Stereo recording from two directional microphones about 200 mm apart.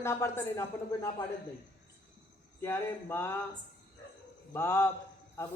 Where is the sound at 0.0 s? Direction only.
15° left (ahead or behind).